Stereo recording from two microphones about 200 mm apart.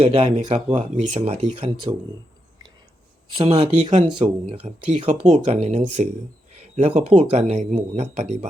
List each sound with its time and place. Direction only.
0.0 s speech: 30° right (ahead or behind)
3.3 s speech: 30° right (ahead or behind)